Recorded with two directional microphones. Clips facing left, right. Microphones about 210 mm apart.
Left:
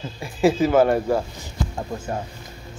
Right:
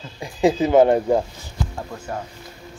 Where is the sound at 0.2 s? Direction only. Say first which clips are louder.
Even; 20° right (ahead or behind).